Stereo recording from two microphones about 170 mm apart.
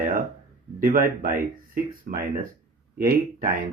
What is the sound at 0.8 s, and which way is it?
Speech, 55° right (ahead or behind).